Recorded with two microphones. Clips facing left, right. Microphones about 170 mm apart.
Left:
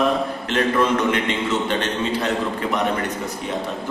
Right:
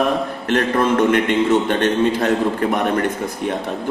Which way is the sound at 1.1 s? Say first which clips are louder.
Right 6 dB; 50° right (ahead or behind).